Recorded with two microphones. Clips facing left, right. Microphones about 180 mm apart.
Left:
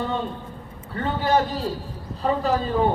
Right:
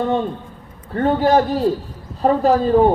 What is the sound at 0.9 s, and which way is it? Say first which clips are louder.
A woman's voice: right 7 dB; 55° right (ahead or behind).